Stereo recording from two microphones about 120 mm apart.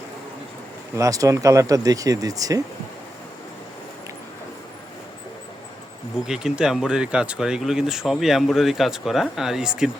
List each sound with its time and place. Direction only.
0.9 s speech: 25° right (ahead or behind)
6.2 s speech: 5° right (ahead or behind)